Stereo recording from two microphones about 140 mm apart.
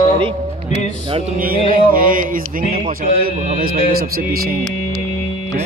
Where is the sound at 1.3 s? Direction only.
90° right.